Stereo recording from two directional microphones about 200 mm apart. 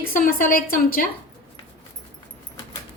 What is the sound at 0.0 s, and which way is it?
A woman's voice, 45° left (ahead or behind).